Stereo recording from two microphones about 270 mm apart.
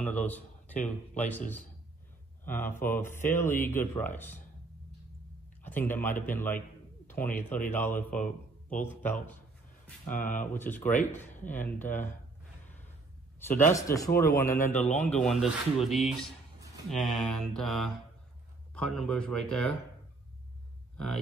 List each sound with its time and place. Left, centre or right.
0.0 s a man's voice: centre
2.4 s speech: centre
5.6 s speech: centre
7.5 s a man's voice: left
7.8 s speech: centre
8.2 s a man's voice: left
8.8 s speech: centre
13.4 s speech: centre
15.2 s speech: centre